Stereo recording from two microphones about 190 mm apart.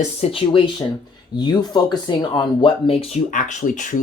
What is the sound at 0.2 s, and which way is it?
Speech, 30° left (ahead or behind).